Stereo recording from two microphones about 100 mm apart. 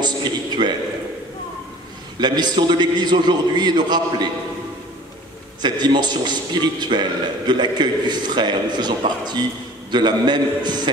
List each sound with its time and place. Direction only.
0.0 s a sound: 45° right (ahead or behind)
2.1 s a man's voice: 45° right (ahead or behind)
5.6 s a man's voice: 45° right (ahead or behind)